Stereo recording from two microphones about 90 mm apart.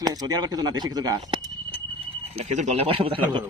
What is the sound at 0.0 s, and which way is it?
Speech, 45° right (ahead or behind).